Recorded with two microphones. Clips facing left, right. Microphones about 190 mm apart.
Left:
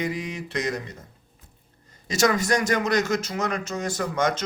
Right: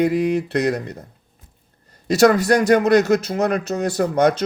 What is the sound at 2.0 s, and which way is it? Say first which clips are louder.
A man's voice: right 8 dB; 60° right (ahead or behind).